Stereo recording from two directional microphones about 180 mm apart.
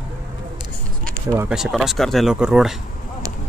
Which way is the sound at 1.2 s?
15° right (ahead or behind).